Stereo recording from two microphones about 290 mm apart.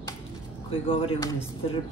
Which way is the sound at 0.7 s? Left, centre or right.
Centre.